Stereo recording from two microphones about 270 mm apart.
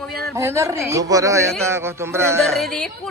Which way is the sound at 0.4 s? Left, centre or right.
Centre.